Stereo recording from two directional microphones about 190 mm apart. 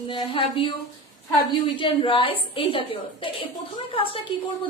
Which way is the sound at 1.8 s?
25° left (ahead or behind).